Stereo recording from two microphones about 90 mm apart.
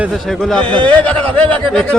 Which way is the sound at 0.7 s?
15° left (ahead or behind).